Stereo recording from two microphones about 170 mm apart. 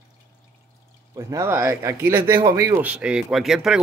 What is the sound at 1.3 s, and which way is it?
Speech, 15° right (ahead or behind).